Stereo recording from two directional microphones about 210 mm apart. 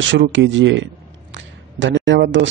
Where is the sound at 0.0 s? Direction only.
60° right (ahead or behind).